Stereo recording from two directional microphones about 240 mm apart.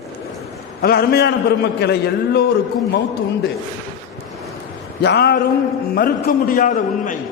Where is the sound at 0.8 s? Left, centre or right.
Left.